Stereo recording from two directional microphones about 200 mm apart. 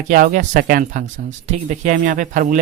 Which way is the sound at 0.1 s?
45° right (ahead or behind).